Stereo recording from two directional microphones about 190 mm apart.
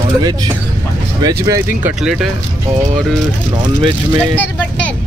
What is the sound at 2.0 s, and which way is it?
Speech, centre (ahead or behind).